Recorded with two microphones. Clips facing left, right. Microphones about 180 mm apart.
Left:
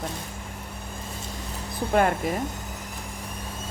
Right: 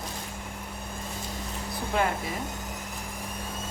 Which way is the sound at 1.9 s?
50° left (ahead or behind).